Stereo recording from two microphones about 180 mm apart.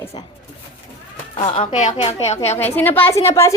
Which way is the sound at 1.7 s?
40° left (ahead or behind).